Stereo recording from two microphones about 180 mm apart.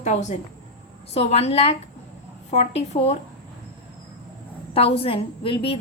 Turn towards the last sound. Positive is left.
turn(degrees=30)  # may be behind; listen again after turning